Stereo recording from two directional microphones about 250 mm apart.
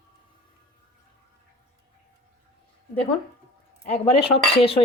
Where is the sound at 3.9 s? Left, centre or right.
Left.